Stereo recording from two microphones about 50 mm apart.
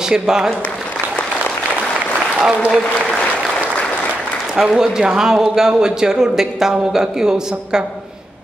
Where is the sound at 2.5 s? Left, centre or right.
Right.